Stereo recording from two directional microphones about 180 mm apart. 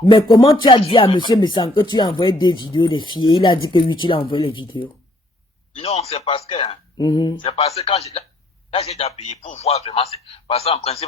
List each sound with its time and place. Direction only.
0.0 s a man's voice: 25° left (ahead or behind)
7.0 s speech: 20° left (ahead or behind)
7.4 s a man's voice: 35° left (ahead or behind)